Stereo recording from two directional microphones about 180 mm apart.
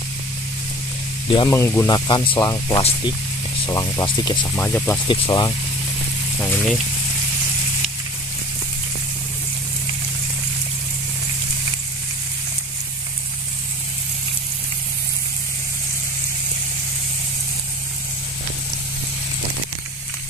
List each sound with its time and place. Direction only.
1.5 s speech: 15° left (ahead or behind)
4.6 s speech: 10° left (ahead or behind)
5.0 s speech: 25° left (ahead or behind)
6.4 s speech: 5° left (ahead or behind)